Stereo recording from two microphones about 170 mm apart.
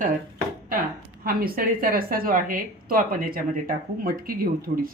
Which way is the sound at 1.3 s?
60° right (ahead or behind).